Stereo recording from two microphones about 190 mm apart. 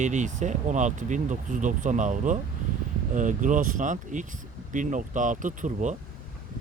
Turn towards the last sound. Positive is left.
turn(degrees=-40)  # may be behind; listen again after turning